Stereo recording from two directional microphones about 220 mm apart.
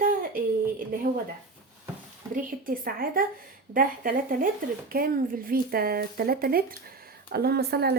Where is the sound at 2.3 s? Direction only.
40° right (ahead or behind).